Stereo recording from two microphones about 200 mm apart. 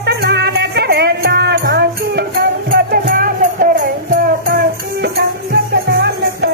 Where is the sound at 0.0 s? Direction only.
55° right (ahead or behind).